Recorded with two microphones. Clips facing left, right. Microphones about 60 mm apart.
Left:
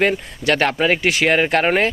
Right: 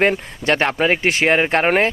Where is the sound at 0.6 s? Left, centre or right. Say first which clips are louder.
Even; centre.